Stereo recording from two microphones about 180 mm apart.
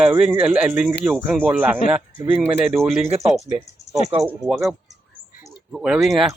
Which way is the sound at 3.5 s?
30° right (ahead or behind).